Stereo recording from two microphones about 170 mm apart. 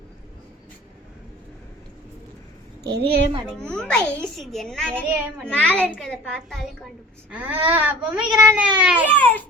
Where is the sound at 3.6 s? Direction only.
5° left (ahead or behind).